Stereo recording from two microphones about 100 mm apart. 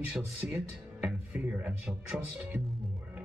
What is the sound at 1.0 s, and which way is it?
Speech, 15° right (ahead or behind).